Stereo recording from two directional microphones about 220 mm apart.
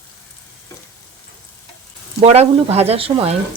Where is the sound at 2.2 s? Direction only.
30° right (ahead or behind).